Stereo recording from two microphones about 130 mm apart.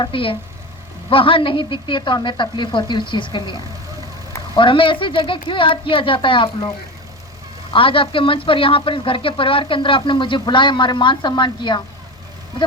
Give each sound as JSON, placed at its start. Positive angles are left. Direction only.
{"t": 0.0, "sound": "speech", "side_deg": 45}
{"t": 4.5, "sound": "speech", "side_deg": 40}
{"t": 7.7, "sound": "speech", "side_deg": 40}